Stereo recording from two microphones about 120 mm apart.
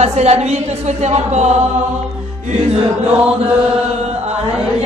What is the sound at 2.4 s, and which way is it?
Music, 65° right (ahead or behind).